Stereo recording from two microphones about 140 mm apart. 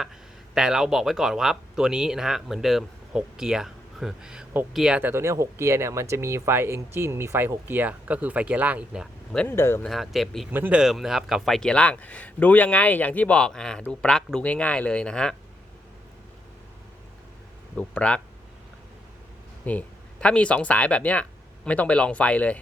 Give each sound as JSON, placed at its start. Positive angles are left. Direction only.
{"t": 0.5, "sound": "speech", "side_deg": -5}
{"t": 9.3, "sound": "speech", "side_deg": 5}
{"t": 9.6, "sound": "speech", "side_deg": 15}
{"t": 9.8, "sound": "speech", "side_deg": 0}
{"t": 10.5, "sound": "speech", "side_deg": -10}
{"t": 17.7, "sound": "speech", "side_deg": 10}
{"t": 19.6, "sound": "speech", "side_deg": 10}